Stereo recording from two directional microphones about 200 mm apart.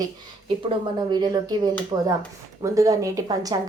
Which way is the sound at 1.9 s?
25° right (ahead or behind).